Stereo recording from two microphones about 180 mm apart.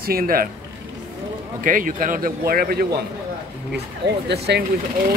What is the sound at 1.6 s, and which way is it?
A man's voice, 50° right (ahead or behind).